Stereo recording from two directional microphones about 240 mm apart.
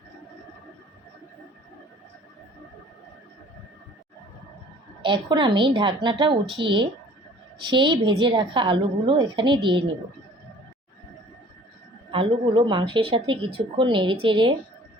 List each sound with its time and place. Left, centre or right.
5.0 s speech: centre
12.1 s speech: right